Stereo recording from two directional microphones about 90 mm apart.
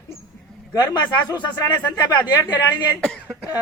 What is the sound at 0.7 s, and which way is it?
A man's voice, 45° left (ahead or behind).